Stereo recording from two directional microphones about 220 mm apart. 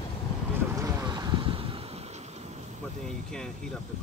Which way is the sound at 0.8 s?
20° right (ahead or behind).